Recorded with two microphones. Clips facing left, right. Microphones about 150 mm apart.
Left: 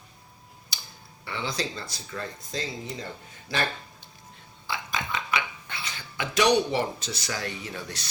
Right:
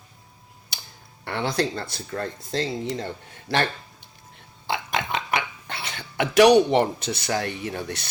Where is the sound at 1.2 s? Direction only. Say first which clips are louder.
Right 7 dB; 60° right (ahead or behind).